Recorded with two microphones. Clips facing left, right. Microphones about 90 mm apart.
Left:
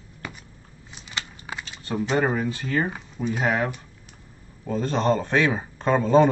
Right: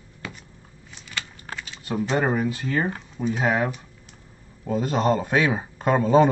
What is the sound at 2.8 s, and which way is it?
Speech, 5° left (ahead or behind).